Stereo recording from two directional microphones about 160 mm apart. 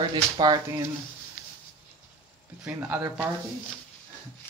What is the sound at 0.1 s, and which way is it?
Speech, 25° right (ahead or behind).